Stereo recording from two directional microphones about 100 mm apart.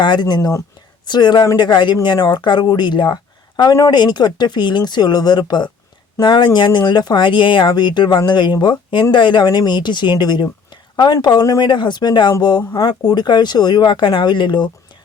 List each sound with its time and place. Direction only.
0.0 s speech: 50° left (ahead or behind)